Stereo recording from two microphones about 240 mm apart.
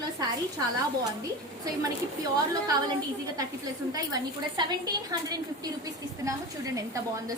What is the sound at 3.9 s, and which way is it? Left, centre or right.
Speech, centre.